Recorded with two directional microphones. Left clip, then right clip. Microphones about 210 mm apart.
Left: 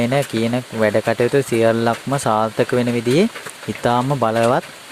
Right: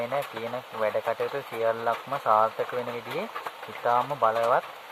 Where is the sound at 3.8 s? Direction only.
40° left (ahead or behind).